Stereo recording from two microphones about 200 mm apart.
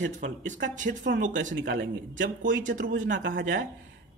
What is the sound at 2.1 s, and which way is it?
A man's voice, 40° right (ahead or behind).